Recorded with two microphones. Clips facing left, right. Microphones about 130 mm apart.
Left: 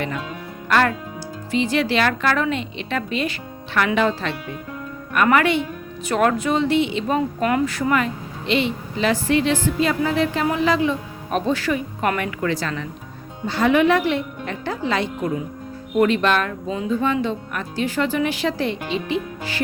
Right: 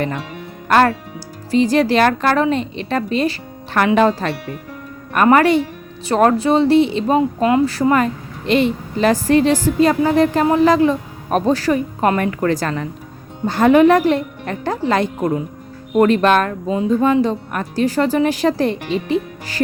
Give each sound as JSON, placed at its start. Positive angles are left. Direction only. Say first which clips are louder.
{"t": 0.7, "sound": "speech", "louder": "right 5 dB", "side_deg": -40}
{"t": 7.2, "sound": "speech", "louder": "right 6 dB", "side_deg": -25}